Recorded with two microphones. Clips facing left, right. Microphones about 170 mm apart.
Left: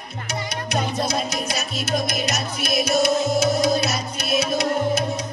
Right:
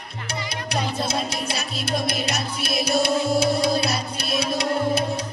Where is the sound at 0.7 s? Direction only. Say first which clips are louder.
Left 2 dB; 30° right (ahead or behind).